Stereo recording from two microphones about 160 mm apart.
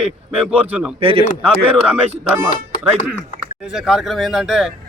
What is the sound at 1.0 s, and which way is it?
Speech, 35° right (ahead or behind).